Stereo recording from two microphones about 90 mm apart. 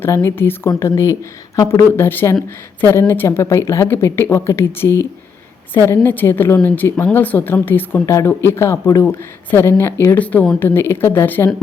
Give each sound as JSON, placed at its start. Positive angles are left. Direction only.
{"t": 0.0, "sound": "a woman's voice", "side_deg": 30}
{"t": 10.2, "sound": "a woman's voice", "side_deg": 15}